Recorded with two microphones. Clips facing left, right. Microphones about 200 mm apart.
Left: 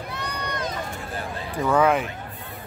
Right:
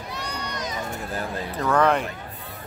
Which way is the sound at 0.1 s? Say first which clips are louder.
Even; 55° left (ahead or behind).